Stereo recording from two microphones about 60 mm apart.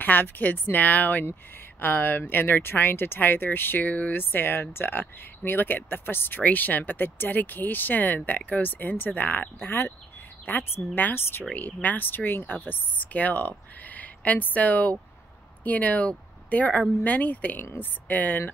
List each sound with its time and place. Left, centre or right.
0.0 s speech: left
11.5 s speech: left